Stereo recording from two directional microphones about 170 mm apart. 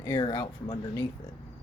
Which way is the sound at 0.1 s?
30° left (ahead or behind).